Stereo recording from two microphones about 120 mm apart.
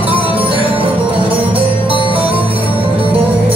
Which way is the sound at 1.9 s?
45° right (ahead or behind).